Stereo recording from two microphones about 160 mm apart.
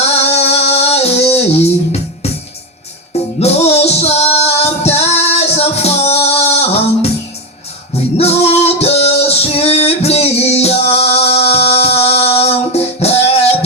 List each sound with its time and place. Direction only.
0.2 s music: 40° left (ahead or behind)
8.2 s music: 40° left (ahead or behind)